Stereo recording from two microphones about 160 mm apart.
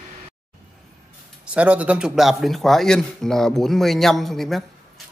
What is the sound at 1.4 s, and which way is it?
Speech, 10° right (ahead or behind).